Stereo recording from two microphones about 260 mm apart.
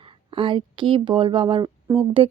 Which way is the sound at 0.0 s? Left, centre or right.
Centre.